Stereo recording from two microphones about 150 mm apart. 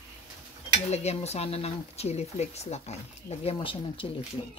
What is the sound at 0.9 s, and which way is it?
Speech, 45° left (ahead or behind).